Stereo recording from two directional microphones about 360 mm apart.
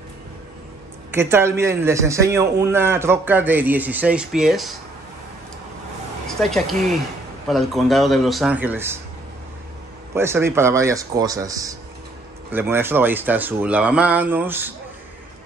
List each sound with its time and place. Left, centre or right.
1.1 s a man's voice: centre
6.2 s speech: centre
10.1 s a man's voice: centre